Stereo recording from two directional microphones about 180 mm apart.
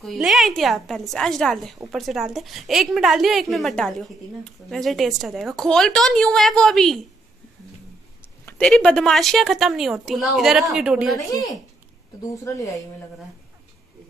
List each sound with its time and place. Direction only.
0.0 s a woman's voice: centre (ahead or behind)
8.2 s a woman's voice: 10° left (ahead or behind)
11.1 s speech: 20° left (ahead or behind)